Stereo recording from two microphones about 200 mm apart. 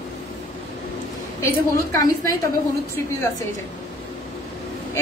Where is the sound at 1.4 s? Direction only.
15° left (ahead or behind).